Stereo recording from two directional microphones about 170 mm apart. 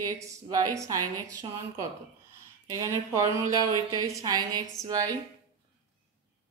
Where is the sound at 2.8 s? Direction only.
20° right (ahead or behind).